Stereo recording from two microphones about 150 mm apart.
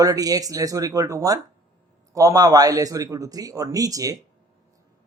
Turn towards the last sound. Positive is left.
turn(degrees=-25)  # may be behind; listen again after turning